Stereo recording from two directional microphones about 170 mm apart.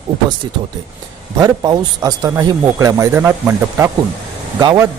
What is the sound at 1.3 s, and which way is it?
A man's voice, 20° right (ahead or behind).